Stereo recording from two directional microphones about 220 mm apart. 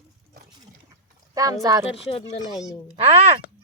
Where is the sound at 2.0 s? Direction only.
25° left (ahead or behind).